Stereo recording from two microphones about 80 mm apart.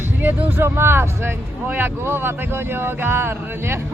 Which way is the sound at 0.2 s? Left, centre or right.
Right.